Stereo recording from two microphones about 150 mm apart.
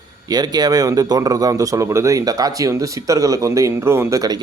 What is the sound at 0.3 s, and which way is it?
A man's voice, 25° right (ahead or behind).